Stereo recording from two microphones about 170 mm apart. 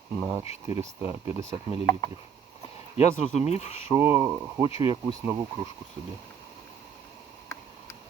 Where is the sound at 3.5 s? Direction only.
40° left (ahead or behind).